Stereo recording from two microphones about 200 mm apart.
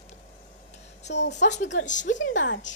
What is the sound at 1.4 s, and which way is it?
Speech, 35° left (ahead or behind).